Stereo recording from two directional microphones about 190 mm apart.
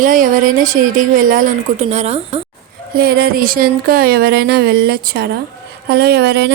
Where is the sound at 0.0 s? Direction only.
45° right (ahead or behind).